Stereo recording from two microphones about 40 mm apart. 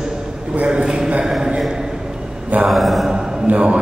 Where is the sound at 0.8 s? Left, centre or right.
Centre.